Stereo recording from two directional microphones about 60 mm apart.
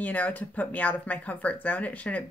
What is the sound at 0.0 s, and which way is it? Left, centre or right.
Speech, left.